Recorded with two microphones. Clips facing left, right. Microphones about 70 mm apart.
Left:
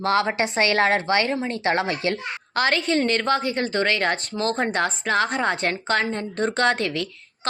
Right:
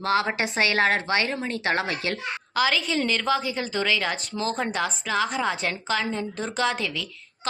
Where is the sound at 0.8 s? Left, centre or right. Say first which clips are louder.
Left 3 dB; left.